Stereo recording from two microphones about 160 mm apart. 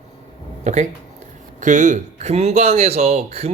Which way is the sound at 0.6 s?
50° right (ahead or behind).